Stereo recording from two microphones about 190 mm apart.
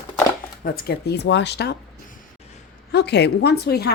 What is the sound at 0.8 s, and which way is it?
Speech, 65° left (ahead or behind).